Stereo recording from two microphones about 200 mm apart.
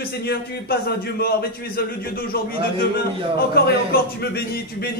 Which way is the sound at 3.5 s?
50° left (ahead or behind).